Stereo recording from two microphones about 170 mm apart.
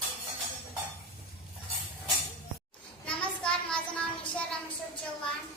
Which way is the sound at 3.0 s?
5° left (ahead or behind).